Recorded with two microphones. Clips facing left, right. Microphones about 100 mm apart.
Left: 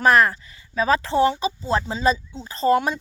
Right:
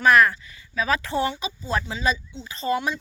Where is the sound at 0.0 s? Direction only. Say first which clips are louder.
Left 1 dB; 35° left (ahead or behind).